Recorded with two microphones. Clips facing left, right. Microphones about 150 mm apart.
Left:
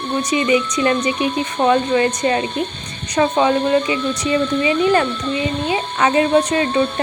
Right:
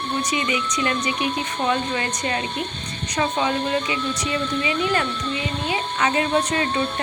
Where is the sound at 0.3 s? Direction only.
25° left (ahead or behind).